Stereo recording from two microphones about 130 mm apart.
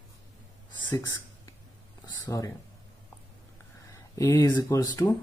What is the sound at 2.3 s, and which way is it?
Speech, 25° left (ahead or behind).